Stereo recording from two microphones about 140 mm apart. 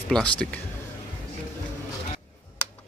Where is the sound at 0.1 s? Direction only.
10° left (ahead or behind).